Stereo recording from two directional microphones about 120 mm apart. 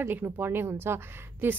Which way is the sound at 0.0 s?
20° right (ahead or behind).